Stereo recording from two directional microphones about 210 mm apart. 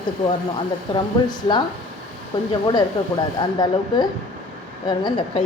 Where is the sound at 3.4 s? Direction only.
20° left (ahead or behind).